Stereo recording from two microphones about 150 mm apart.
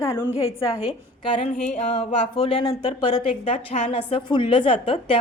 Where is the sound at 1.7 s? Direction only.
45° left (ahead or behind).